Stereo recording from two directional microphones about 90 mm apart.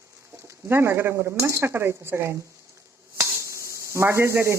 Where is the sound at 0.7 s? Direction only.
25° right (ahead or behind).